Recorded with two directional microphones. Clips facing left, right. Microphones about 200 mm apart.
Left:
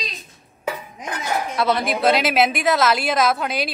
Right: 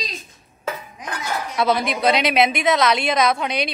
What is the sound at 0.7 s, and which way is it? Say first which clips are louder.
Dishes: left 1 dB; 20° left (ahead or behind).